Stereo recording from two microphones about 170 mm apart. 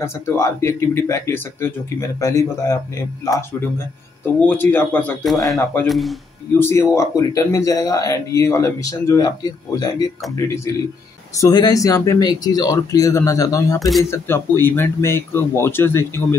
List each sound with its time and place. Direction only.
0.0 s speech: 15° left (ahead or behind)
5.2 s a man's voice: centre (ahead or behind)
6.6 s speech: 15° left (ahead or behind)
11.3 s speech: 20° left (ahead or behind)
13.7 s a man's voice: centre (ahead or behind)
14.1 s speech: 15° left (ahead or behind)